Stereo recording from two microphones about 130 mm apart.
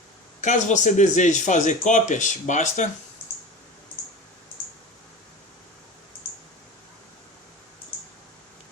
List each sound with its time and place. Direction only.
0.4 s speech: 70° left (ahead or behind)